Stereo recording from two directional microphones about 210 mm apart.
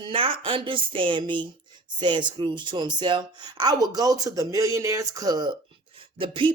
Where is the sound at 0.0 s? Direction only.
25° right (ahead or behind).